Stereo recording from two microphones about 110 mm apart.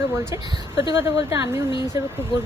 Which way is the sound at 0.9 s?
25° right (ahead or behind).